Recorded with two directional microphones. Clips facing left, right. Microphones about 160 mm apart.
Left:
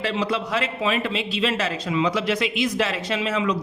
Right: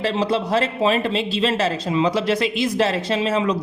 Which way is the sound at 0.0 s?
30° right (ahead or behind).